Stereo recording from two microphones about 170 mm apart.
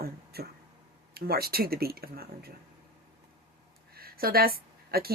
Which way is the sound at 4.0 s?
60° right (ahead or behind).